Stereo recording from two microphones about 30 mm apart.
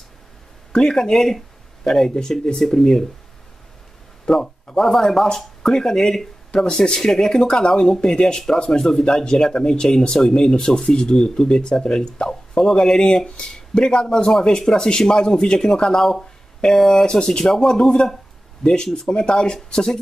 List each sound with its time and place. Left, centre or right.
0.7 s speech: left
4.3 s speech: left
6.5 s speech: left
6.8 s speech: centre
16.0 s speech: centre
19.0 s speech: left